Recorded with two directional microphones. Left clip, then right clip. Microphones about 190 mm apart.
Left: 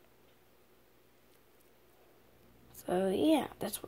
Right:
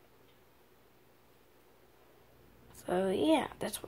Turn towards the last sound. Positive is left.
turn(degrees=25)  # may be behind; listen again after turning